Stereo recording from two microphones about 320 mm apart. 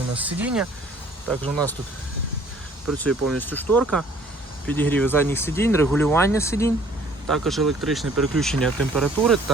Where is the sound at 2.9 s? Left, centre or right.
Centre.